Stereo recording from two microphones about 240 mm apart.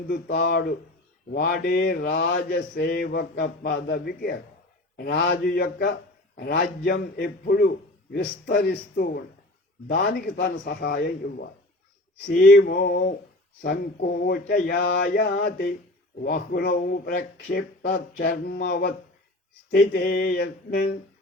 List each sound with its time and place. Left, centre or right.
0.1 s mantra: left